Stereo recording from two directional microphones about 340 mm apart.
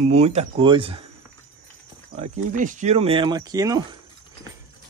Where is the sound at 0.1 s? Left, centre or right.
Centre.